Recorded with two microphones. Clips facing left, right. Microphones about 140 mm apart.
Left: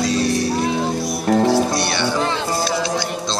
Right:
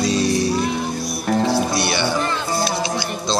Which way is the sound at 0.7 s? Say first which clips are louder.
Left 3 dB; 25° left (ahead or behind).